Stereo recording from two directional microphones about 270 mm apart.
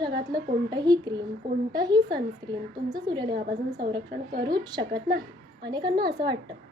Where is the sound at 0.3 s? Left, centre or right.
Centre.